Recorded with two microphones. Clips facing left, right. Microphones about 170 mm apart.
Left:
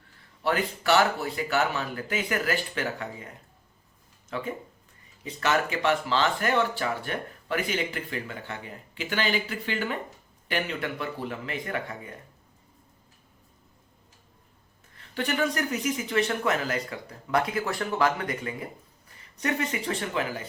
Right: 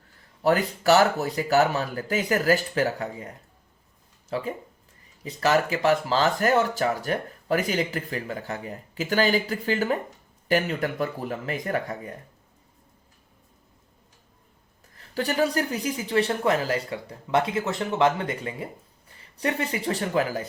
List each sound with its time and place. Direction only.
0.4 s speech: 40° right (ahead or behind)
14.9 s speech: 35° right (ahead or behind)